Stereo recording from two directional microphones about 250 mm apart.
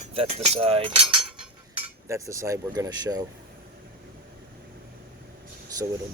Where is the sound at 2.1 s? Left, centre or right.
Centre.